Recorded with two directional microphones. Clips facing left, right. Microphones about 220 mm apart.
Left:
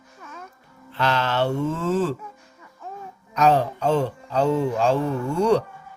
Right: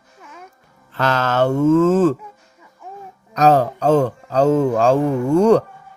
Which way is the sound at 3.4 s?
40° right (ahead or behind).